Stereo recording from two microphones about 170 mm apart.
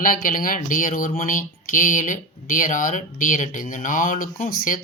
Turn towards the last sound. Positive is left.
turn(degrees=50)  # may be behind; listen again after turning